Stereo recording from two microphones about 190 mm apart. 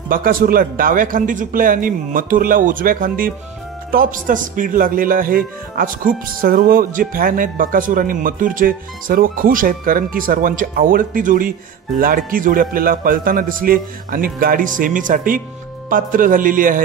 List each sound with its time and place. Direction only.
0.1 s a man's voice: 50° right (ahead or behind)